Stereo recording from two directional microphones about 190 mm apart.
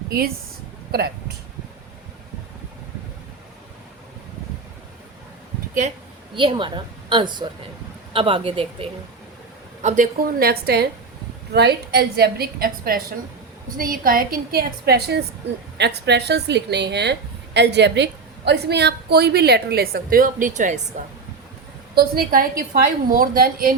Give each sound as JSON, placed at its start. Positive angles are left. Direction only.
{"t": 0.1, "sound": "a woman's voice", "side_deg": -55}
{"t": 5.8, "sound": "a woman's voice", "side_deg": -40}
{"t": 6.3, "sound": "speech", "side_deg": -25}
{"t": 9.8, "sound": "a woman's voice", "side_deg": -40}
{"t": 21.9, "sound": "a woman's voice", "side_deg": -55}